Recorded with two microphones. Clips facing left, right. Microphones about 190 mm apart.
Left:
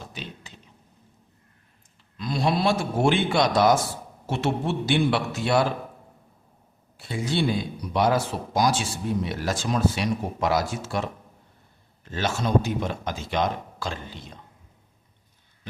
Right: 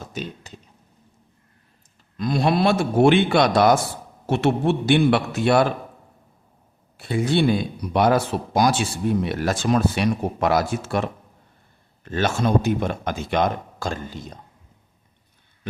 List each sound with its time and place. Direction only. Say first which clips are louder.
0.0 s a sound: right 7 dB; 45° right (ahead or behind)
2.1 s speech: right 4 dB; 50° right (ahead or behind)
6.9 s speech: right 6 dB; 60° right (ahead or behind)
12.0 s speech: right 5 dB; 60° right (ahead or behind)